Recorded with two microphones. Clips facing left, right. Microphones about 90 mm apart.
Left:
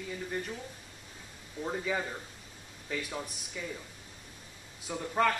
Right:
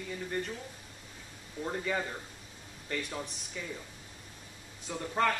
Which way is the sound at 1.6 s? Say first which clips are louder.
Even; centre (ahead or behind).